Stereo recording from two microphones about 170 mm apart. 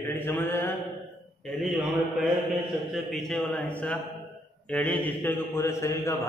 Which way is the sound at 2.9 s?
Centre (ahead or behind).